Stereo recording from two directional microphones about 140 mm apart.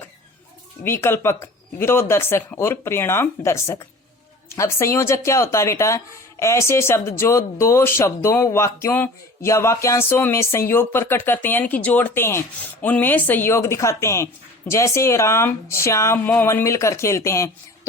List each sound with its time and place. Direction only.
0.9 s speech: 15° left (ahead or behind)